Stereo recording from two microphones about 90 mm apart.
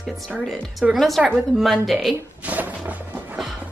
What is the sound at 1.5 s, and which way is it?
Speech, centre (ahead or behind).